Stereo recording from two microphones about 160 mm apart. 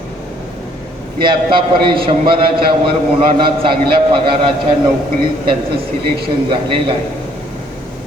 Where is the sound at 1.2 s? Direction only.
30° right (ahead or behind).